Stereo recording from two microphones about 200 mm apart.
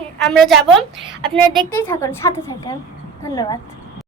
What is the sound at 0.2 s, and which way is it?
Speech, 5° left (ahead or behind).